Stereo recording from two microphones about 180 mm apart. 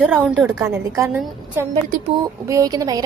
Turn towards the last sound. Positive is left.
turn(degrees=-20)  # may be behind; listen again after turning